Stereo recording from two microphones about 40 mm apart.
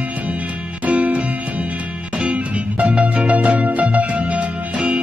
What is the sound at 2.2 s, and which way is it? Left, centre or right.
Music, right.